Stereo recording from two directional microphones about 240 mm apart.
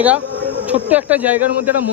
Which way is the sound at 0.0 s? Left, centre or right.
Centre.